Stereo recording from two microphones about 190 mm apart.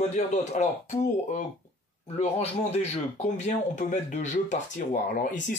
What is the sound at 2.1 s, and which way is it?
Speech, 35° left (ahead or behind).